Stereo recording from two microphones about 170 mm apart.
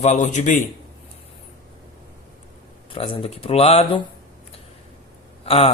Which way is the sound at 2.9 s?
35° left (ahead or behind).